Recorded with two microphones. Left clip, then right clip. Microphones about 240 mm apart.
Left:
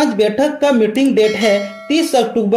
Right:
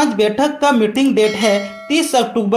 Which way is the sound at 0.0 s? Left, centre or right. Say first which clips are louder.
Left 1 dB; centre.